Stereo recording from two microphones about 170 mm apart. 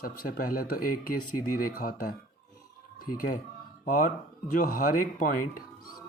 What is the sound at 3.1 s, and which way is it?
Speech, 55° left (ahead or behind).